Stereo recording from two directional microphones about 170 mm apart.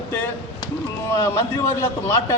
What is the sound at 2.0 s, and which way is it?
Speech, 20° left (ahead or behind).